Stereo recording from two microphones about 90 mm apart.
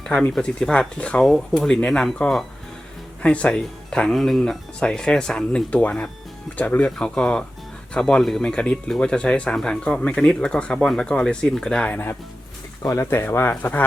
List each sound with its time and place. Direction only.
0.0 s speech: 10° left (ahead or behind)
12.8 s speech: 30° left (ahead or behind)